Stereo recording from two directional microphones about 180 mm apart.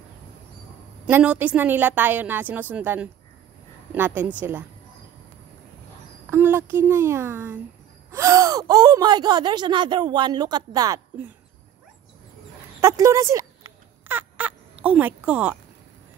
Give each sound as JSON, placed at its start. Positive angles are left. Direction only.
{"t": 1.0, "sound": "a woman's voice", "side_deg": -5}
{"t": 6.3, "sound": "a child's voice", "side_deg": -15}
{"t": 12.8, "sound": "a woman's voice", "side_deg": -15}
{"t": 14.0, "sound": "fowl", "side_deg": -10}